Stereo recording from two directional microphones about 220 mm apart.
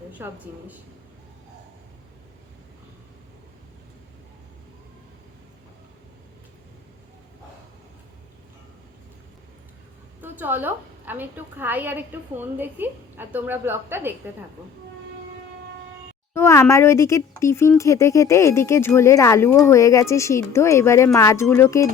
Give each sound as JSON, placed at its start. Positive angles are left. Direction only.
{"t": 0.2, "sound": "a woman's voice", "side_deg": -10}
{"t": 10.2, "sound": "a woman's voice", "side_deg": -10}
{"t": 16.3, "sound": "speech", "side_deg": 10}